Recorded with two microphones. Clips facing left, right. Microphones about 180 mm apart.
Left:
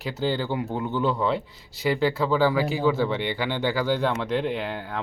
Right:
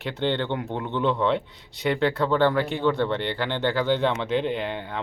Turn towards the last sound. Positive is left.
turn(degrees=0)  # may be behind; listen again after turning